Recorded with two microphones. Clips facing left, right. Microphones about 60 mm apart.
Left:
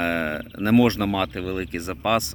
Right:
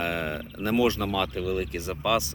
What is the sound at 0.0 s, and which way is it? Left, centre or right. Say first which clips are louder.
Speech: left 5 dB; left.